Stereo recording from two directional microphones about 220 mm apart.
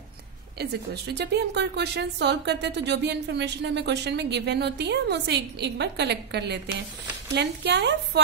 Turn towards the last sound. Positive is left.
turn(degrees=-50)  # may be behind; listen again after turning